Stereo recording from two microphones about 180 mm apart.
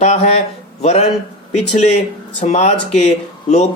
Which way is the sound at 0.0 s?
35° left (ahead or behind).